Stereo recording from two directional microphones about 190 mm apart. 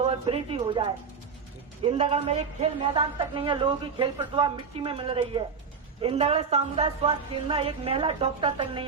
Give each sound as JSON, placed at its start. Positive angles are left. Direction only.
{"t": 0.0, "sound": "a man's voice", "side_deg": -30}